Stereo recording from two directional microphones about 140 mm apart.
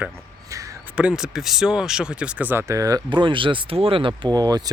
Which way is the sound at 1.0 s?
5° right (ahead or behind).